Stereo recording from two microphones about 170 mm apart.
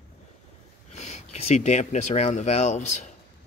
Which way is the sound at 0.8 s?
40° left (ahead or behind).